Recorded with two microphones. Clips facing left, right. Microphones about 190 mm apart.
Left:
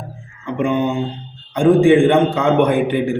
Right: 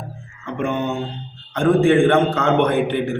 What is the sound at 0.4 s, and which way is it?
Mantra, 15° left (ahead or behind).